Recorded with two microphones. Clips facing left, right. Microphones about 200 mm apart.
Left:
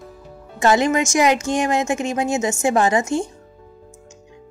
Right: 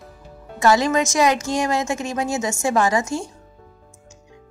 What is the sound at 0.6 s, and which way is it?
A woman's voice, 20° left (ahead or behind).